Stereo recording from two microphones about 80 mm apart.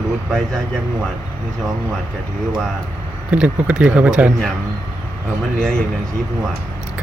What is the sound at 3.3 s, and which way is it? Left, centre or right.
Speech, centre.